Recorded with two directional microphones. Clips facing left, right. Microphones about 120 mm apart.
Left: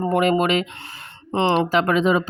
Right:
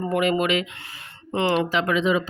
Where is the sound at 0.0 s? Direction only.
40° left (ahead or behind).